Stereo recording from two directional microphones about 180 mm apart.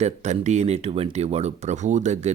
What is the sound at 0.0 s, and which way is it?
Speech, 40° right (ahead or behind).